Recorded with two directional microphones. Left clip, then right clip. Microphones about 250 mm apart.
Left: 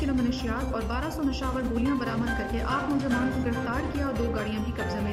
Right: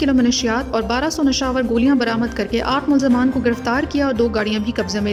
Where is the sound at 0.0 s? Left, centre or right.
Right.